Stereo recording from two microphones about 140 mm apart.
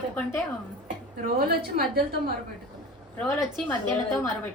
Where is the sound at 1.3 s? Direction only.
90° right.